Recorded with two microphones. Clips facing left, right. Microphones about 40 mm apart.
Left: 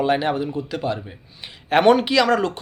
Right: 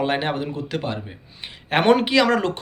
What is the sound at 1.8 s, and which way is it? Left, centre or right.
Speech, right.